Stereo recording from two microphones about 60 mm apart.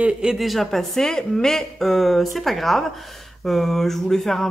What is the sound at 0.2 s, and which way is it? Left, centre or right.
Speech, centre.